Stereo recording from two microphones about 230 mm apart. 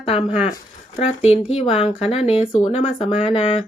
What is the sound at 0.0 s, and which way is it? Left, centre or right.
Speech, left.